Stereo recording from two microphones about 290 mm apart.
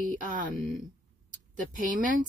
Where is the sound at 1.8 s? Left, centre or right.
Right.